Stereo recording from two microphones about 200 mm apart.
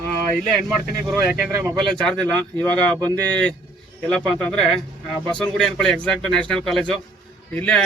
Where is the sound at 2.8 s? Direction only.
20° right (ahead or behind).